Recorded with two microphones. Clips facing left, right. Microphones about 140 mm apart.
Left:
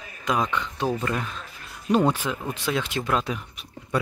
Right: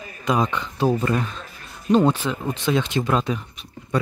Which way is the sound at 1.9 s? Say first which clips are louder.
Right 3 dB; 10° left (ahead or behind).